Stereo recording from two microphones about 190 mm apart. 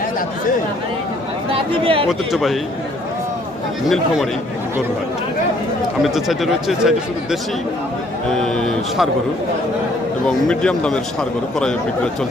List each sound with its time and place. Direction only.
1.5 s speech: 30° right (ahead or behind)
2.0 s a man's voice: centre (ahead or behind)
3.8 s a man's voice: centre (ahead or behind)
6.0 s a man's voice: centre (ahead or behind)
10.2 s a man's voice: 5° left (ahead or behind)